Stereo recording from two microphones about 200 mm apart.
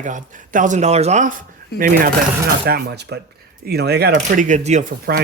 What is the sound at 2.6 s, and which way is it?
Speech, 55° right (ahead or behind).